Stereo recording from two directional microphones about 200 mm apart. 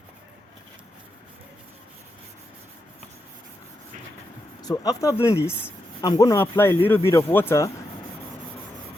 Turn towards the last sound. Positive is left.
turn(degrees=15)  # may be behind; listen again after turning